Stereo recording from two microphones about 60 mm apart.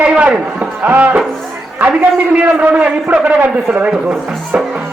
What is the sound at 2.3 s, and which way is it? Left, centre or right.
A man's voice, right.